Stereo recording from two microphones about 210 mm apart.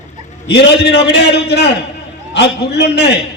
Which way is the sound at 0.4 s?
55° left (ahead or behind).